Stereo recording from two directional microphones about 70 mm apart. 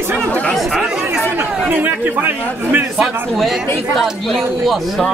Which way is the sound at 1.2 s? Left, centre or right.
Centre.